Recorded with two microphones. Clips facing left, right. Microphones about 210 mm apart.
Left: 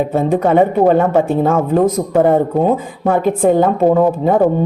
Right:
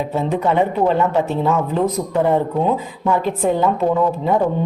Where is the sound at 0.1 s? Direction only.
50° left (ahead or behind).